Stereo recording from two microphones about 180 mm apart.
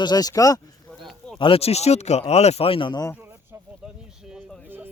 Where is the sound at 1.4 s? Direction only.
30° left (ahead or behind).